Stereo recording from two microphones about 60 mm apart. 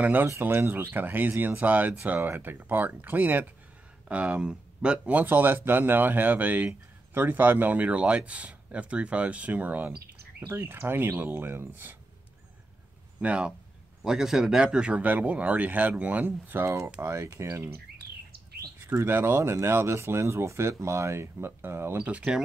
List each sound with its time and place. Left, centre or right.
0.0 s speech: right
4.1 s speech: centre
5.2 s speech: right
13.2 s speech: centre
14.0 s speech: centre; by 16.6 s right
16.6 s speech: right
18.9 s speech: right
21.9 s speech: centre